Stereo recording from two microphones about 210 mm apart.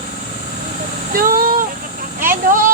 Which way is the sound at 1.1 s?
40° right (ahead or behind).